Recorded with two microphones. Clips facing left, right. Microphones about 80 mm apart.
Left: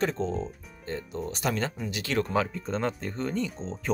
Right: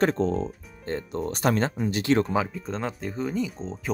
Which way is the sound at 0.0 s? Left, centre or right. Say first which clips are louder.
Right 5 dB; right.